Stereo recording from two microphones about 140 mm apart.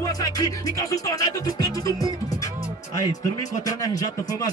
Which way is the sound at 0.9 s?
25° left (ahead or behind).